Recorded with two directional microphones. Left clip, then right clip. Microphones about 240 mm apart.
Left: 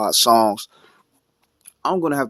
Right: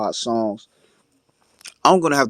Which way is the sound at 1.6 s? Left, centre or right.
Right.